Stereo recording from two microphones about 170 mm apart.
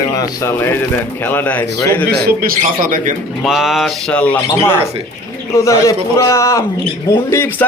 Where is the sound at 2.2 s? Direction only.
60° right (ahead or behind).